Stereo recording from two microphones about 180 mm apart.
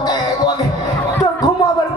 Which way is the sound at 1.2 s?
20° left (ahead or behind).